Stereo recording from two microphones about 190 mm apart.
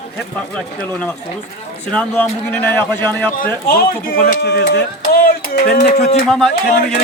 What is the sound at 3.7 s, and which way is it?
Speech, 50° left (ahead or behind).